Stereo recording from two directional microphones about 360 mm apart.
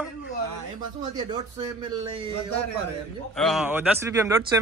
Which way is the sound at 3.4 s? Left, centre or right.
Centre.